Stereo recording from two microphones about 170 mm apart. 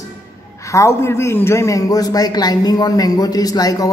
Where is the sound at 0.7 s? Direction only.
15° left (ahead or behind).